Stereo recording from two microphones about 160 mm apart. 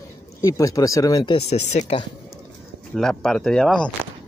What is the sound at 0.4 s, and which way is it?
Speech, 20° left (ahead or behind).